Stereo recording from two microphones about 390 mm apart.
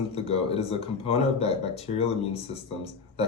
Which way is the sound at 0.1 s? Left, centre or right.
Centre.